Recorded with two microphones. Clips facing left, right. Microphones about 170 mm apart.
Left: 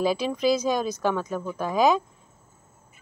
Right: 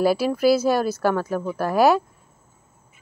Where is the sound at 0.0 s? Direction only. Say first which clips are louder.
Right 5 dB; 5° right (ahead or behind).